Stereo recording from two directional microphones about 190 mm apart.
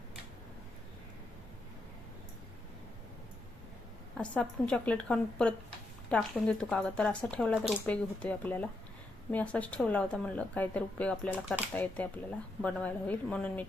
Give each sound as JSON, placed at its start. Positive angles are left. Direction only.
{"t": 4.2, "sound": "a woman's voice", "side_deg": 5}